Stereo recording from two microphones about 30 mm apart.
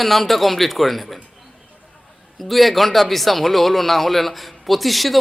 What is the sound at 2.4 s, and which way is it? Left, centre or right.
Speech, centre.